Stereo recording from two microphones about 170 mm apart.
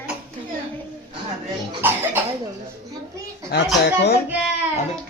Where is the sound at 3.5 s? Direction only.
75° left (ahead or behind).